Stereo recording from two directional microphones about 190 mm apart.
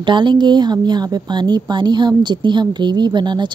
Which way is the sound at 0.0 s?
25° right (ahead or behind).